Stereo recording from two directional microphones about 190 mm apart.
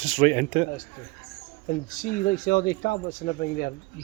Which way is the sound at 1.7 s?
45° left (ahead or behind).